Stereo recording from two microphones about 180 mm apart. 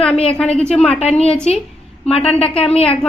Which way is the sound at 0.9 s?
35° left (ahead or behind).